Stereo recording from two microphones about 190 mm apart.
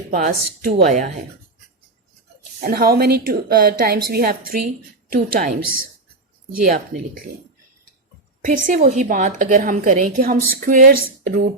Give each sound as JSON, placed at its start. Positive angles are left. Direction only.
{"t": 0.1, "sound": "a woman's voice", "side_deg": -45}
{"t": 2.6, "sound": "a woman's voice", "side_deg": -50}
{"t": 8.4, "sound": "a woman's voice", "side_deg": -45}